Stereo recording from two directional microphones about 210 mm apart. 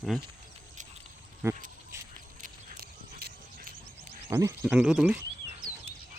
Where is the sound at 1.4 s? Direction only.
10° right (ahead or behind).